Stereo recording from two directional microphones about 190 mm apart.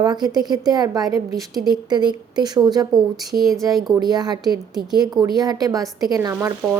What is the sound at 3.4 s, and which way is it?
Speech, centre (ahead or behind).